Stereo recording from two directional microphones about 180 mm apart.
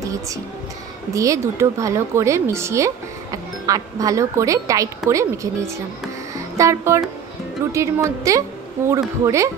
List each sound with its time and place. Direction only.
0.0 s music: 20° right (ahead or behind)
1.1 s speech: 15° right (ahead or behind)
6.6 s speech: 15° right (ahead or behind)